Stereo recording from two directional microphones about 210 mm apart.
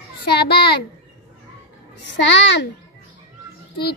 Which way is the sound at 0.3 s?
50° left (ahead or behind).